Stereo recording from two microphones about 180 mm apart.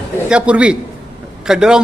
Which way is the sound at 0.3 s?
5° right (ahead or behind).